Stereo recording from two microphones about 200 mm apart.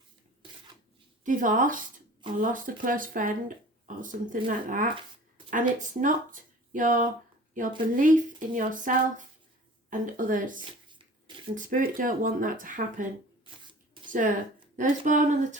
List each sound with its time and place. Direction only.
1.2 s speech: 40° right (ahead or behind)
10.8 s a sound: 25° right (ahead or behind)
11.5 s speech: 45° right (ahead or behind)
14.1 s speech: 40° right (ahead or behind)